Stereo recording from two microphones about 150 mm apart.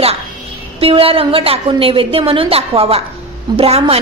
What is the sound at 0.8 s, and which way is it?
A woman's voice, 40° right (ahead or behind).